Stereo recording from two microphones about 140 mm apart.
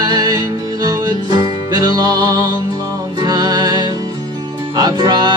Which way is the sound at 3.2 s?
30° right (ahead or behind).